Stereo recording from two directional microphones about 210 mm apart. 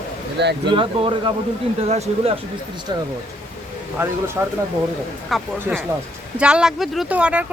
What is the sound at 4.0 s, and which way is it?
Speech, 10° right (ahead or behind).